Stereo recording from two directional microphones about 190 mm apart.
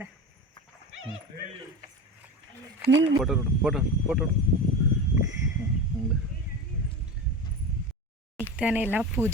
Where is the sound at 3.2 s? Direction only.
Centre (ahead or behind).